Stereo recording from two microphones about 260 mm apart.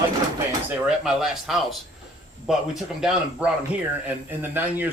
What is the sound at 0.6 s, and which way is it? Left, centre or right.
Speech, centre.